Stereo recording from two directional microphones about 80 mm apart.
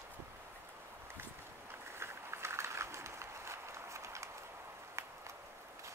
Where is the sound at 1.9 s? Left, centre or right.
Right.